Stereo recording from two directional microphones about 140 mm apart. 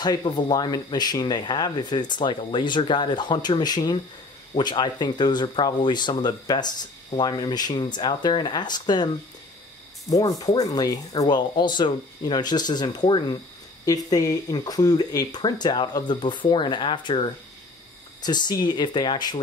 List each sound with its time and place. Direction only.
0.0 s speech: 30° left (ahead or behind)
18.2 s speech: 30° left (ahead or behind)